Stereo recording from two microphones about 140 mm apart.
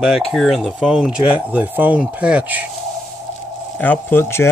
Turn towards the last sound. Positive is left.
turn(degrees=15)  # may be behind; listen again after turning